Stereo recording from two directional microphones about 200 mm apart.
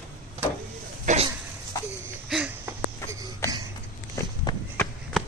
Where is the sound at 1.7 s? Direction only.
15° left (ahead or behind).